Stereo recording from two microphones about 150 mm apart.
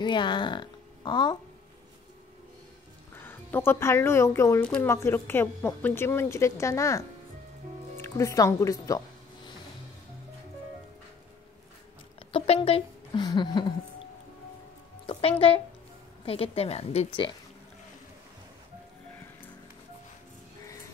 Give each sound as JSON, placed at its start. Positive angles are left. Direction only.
{"t": 0.0, "sound": "a woman's voice", "side_deg": 30}
{"t": 3.3, "sound": "a woman's voice", "side_deg": 15}
{"t": 12.3, "sound": "a woman's voice", "side_deg": 35}
{"t": 15.0, "sound": "a woman's voice", "side_deg": 40}